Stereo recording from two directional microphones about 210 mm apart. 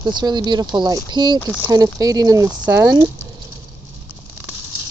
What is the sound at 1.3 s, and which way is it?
Speech, 10° left (ahead or behind).